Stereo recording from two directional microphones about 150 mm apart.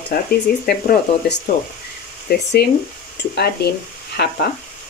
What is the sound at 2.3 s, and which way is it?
Speech, 90° left.